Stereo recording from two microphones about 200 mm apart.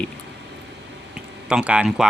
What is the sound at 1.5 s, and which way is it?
Speech, 5° right (ahead or behind).